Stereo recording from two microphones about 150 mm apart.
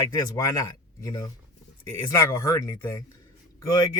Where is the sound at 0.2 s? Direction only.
20° left (ahead or behind).